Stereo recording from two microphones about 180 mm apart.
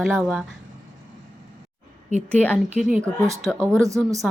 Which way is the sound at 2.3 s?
10° left (ahead or behind).